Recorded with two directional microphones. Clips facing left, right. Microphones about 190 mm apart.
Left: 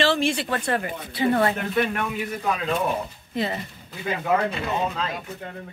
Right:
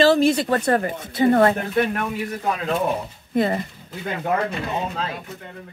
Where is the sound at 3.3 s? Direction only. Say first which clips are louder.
Right 7 dB; 50° right (ahead or behind).